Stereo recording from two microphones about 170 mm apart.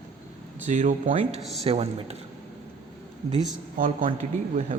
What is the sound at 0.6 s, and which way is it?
A man's voice, 45° right (ahead or behind).